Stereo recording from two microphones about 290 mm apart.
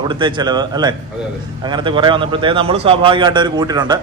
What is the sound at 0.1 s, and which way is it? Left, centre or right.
A man's voice, centre.